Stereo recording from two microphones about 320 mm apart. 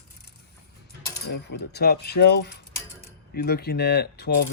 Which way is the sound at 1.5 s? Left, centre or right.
Left.